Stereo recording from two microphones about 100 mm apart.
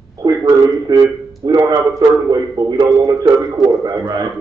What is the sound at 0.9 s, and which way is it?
A man's voice, 40° right (ahead or behind).